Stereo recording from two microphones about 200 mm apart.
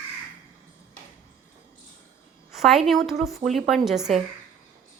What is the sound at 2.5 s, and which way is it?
A woman's voice, centre (ahead or behind).